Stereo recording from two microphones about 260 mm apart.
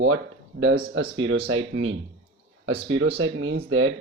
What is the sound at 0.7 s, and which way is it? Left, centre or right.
Speech, right.